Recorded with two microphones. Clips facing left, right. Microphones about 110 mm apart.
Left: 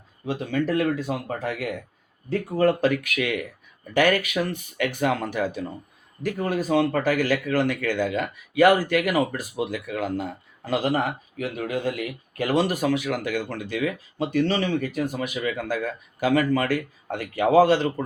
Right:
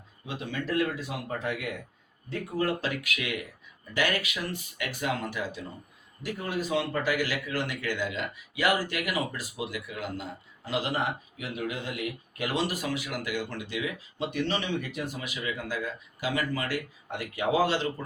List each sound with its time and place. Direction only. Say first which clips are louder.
0.3 s a man's voice: left 8 dB; 50° left (ahead or behind)
2.6 s a man's voice: left 9 dB; 55° left (ahead or behind)